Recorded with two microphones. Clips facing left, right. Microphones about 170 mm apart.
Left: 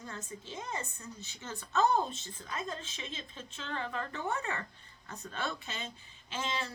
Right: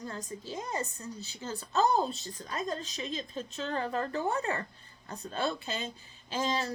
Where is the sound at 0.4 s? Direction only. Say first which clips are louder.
Right 5 dB; 35° right (ahead or behind).